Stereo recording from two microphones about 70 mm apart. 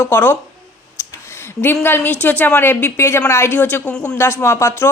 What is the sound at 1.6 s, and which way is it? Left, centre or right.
Speech, left.